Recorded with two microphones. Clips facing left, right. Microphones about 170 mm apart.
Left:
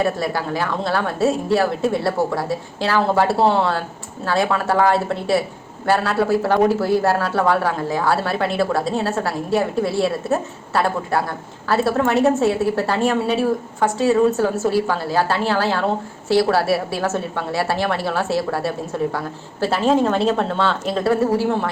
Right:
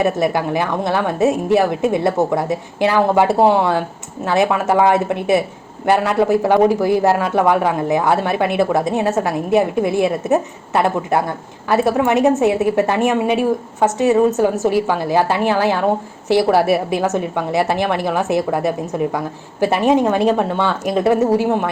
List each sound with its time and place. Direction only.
0.0 s a woman's voice: 20° right (ahead or behind)